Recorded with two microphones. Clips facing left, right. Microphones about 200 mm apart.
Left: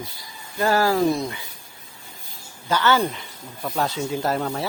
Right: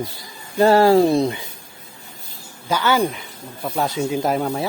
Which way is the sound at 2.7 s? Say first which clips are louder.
Right 2 dB; 10° right (ahead or behind).